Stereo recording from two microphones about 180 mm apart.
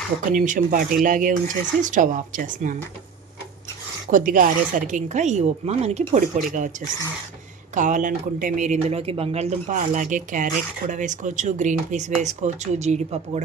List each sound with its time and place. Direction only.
0.3 s a woman's voice: 50° right (ahead or behind)
4.1 s a woman's voice: 50° right (ahead or behind)
7.7 s speech: 45° right (ahead or behind)